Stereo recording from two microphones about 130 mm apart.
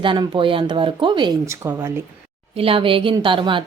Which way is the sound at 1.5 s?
20° right (ahead or behind).